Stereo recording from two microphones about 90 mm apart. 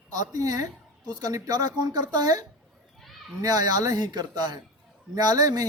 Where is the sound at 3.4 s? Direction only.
45° right (ahead or behind).